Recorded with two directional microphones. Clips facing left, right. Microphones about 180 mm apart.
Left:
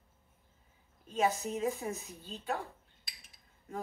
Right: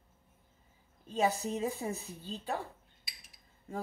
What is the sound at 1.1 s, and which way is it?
Speech, 35° right (ahead or behind).